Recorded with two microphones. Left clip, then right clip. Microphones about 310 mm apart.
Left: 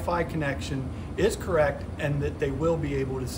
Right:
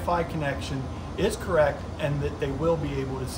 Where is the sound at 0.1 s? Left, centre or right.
Centre.